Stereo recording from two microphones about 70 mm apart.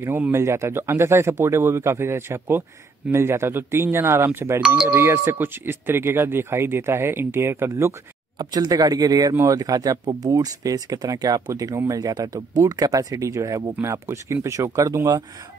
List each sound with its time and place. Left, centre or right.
0.3 s speech: right
8.4 s speech: right
12.1 s speech: right